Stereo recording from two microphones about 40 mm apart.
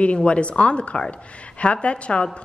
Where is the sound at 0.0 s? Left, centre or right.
Left.